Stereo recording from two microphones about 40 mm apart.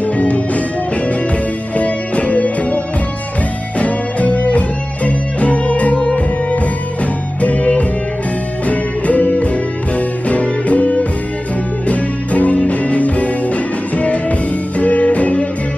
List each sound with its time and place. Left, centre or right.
0.0 s music: left
1.8 s music: left
3.8 s music: left
7.4 s music: left